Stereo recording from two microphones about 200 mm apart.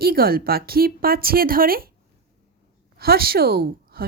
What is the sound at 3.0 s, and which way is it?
Speech, 50° right (ahead or behind).